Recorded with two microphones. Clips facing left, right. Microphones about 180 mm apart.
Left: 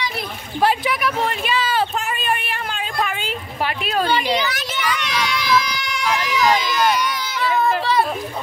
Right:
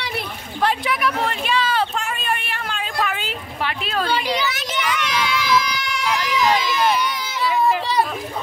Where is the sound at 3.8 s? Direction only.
10° left (ahead or behind).